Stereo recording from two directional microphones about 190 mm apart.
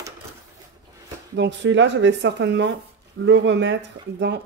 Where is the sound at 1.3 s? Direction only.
70° right (ahead or behind).